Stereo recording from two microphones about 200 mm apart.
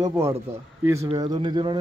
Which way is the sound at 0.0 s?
15° right (ahead or behind).